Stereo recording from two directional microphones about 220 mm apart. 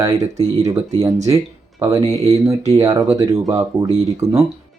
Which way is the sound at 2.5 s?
15° right (ahead or behind).